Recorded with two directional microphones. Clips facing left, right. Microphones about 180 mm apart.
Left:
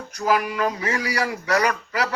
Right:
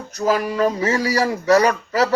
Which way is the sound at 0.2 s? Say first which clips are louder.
Right 3 dB; 30° right (ahead or behind).